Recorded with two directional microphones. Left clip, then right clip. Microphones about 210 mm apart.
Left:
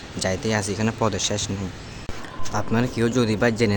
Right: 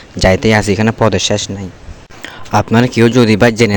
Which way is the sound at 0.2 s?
40° right (ahead or behind).